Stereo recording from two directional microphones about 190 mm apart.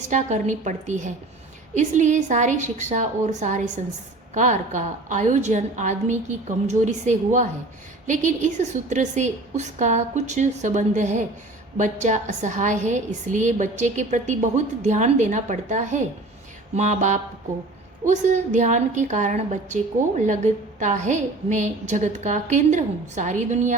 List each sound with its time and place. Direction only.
0.1 s a woman's voice: 40° right (ahead or behind)